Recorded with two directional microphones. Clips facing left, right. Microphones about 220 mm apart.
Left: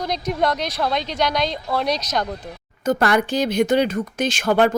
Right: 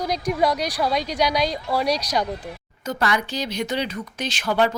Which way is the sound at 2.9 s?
50° left (ahead or behind).